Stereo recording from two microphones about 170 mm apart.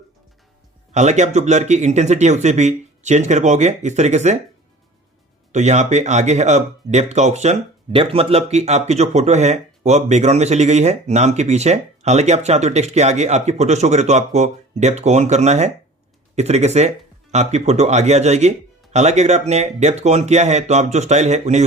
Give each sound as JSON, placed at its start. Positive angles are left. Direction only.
{"t": 0.9, "sound": "speech", "side_deg": -45}
{"t": 5.5, "sound": "speech", "side_deg": -45}